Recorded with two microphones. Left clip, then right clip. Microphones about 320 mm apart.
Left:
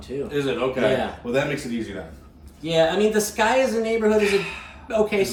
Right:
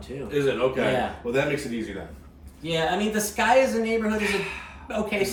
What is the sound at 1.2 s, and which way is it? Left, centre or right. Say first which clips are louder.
Speech: left 3 dB; centre.